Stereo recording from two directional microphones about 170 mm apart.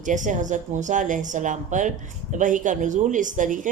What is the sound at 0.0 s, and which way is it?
Speech, 45° right (ahead or behind).